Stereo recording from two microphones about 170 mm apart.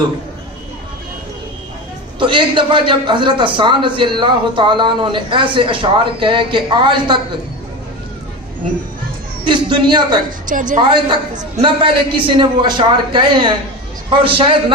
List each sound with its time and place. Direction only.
2.1 s a man's voice: 30° right (ahead or behind)
9.4 s a man's voice: 30° right (ahead or behind)
10.4 s a woman's voice: 50° right (ahead or behind)
10.8 s a man's voice: 30° right (ahead or behind)